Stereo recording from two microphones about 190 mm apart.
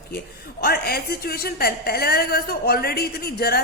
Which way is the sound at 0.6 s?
55° left (ahead or behind).